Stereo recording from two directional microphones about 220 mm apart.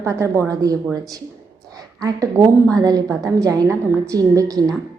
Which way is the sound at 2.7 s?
15° right (ahead or behind).